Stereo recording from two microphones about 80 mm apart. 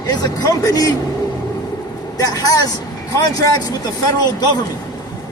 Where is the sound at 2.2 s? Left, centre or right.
Left.